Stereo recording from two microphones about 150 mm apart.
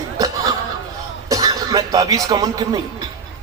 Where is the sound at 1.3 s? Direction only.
25° right (ahead or behind).